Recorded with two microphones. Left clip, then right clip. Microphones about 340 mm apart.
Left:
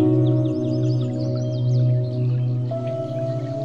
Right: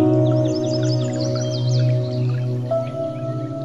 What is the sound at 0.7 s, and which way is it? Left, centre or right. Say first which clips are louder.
Music: right 3 dB; right.